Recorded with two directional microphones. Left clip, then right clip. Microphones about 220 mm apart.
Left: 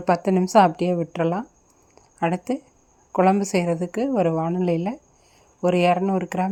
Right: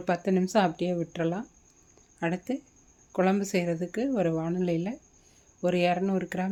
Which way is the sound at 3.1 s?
10° left (ahead or behind).